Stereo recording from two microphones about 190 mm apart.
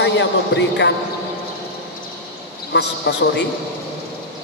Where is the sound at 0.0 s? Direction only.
70° left (ahead or behind).